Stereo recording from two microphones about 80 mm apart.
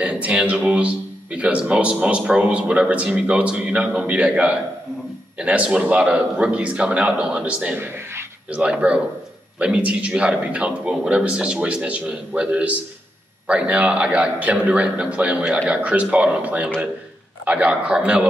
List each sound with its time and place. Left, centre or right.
0.0 s a man's voice: centre
7.8 s a sound: right
8.5 s a man's voice: centre